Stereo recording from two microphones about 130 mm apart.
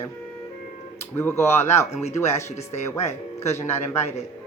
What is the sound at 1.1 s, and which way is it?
Speech, 20° left (ahead or behind).